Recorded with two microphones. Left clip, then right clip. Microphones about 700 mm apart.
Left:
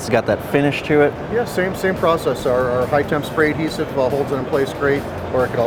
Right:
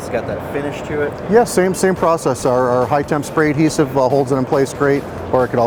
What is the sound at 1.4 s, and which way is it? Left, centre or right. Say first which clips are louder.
Speech: right 5 dB; right.